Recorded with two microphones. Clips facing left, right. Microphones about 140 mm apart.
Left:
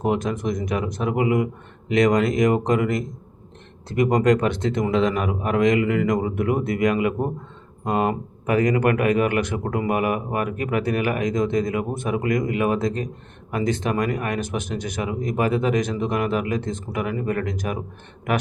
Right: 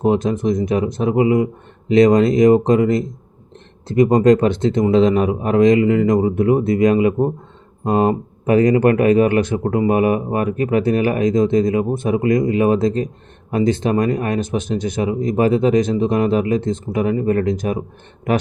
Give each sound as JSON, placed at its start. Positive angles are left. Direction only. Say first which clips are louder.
{"t": 0.0, "sound": "speech", "louder": "right 6 dB", "side_deg": -25}